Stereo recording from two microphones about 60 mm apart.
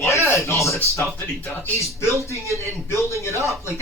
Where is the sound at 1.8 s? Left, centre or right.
Left.